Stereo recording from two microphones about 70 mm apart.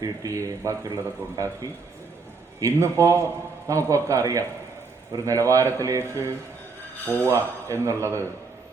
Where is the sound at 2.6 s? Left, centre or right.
Right.